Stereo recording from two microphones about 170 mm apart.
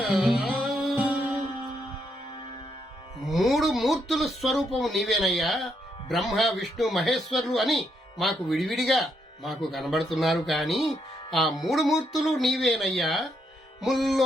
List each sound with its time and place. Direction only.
0.0 s music: centre (ahead or behind)
3.2 s speech: centre (ahead or behind)
10.8 s speech: 30° left (ahead or behind)
11.3 s speech: centre (ahead or behind)